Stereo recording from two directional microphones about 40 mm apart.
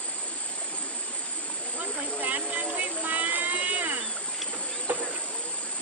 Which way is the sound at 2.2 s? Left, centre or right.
Right.